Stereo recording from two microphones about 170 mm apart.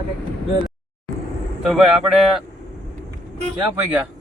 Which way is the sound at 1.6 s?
Centre (ahead or behind).